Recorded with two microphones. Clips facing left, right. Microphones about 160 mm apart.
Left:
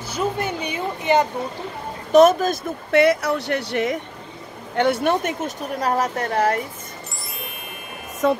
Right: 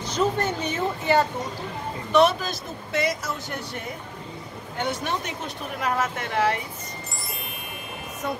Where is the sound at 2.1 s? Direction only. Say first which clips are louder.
Left 7 dB; 45° left (ahead or behind); by 4.0 s 80° left.